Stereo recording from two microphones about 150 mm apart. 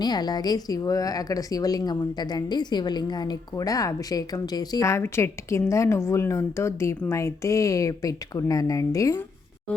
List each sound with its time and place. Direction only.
0.0 s a woman's voice: 25° left (ahead or behind)